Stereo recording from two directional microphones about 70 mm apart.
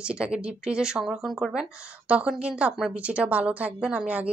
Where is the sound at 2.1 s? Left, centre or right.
Centre.